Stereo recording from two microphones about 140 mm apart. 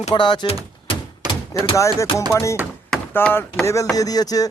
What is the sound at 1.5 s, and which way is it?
Speech, 20° left (ahead or behind).